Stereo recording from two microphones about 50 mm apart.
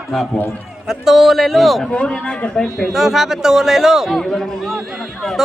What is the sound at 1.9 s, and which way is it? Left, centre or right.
A man's voice, left.